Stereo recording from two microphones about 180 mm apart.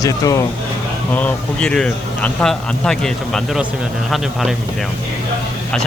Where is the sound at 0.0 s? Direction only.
20° left (ahead or behind).